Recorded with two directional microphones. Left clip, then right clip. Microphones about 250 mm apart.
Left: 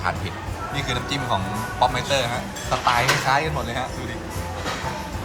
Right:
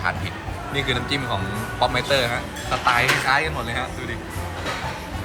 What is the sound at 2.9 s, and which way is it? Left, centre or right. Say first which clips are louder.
Speech: right 1 dB; left.